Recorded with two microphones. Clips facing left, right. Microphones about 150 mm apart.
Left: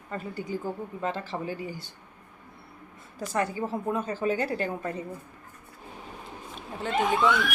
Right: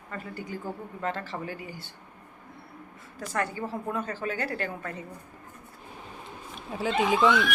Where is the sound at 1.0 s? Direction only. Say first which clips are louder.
Left 1 dB; 20° left (ahead or behind).